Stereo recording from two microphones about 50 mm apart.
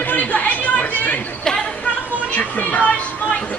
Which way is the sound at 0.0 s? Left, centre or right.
Left.